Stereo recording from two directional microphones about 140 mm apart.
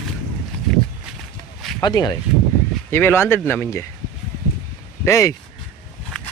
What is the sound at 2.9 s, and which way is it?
Speech, 15° left (ahead or behind).